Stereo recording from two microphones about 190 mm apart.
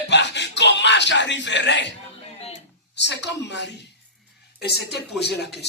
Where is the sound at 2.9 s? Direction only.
65° left (ahead or behind).